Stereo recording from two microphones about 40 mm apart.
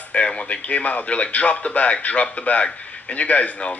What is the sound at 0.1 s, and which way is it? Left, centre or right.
A man's voice, left.